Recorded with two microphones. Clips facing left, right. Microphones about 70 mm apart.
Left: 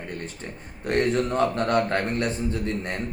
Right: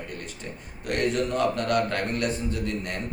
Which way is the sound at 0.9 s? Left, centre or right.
Left.